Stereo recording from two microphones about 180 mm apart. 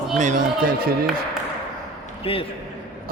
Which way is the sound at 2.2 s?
30° left (ahead or behind).